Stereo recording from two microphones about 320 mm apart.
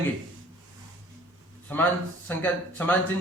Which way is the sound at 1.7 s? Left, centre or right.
Centre.